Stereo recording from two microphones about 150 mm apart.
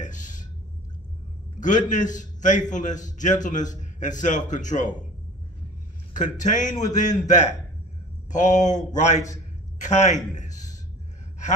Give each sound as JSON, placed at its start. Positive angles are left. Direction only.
{"t": 0.0, "sound": "a sound", "side_deg": 55}
{"t": 1.6, "sound": "a man's voice", "side_deg": 55}
{"t": 6.1, "sound": "a man's voice", "side_deg": 55}